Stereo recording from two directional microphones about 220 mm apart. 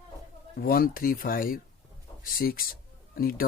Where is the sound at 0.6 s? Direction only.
40° left (ahead or behind).